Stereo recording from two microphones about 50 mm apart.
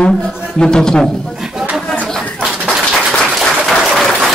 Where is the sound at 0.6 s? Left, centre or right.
Centre.